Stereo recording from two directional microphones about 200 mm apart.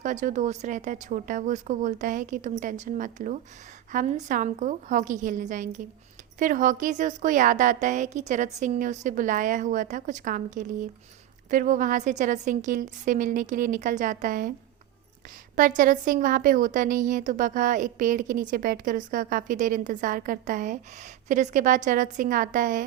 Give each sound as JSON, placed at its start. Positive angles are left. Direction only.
{"t": 0.0, "sound": "a woman's voice", "side_deg": -40}
{"t": 15.5, "sound": "a woman's voice", "side_deg": -40}